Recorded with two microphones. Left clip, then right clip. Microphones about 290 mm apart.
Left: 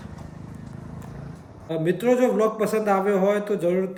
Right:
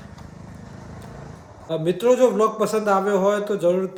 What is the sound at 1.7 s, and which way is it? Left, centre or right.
A man's voice, centre.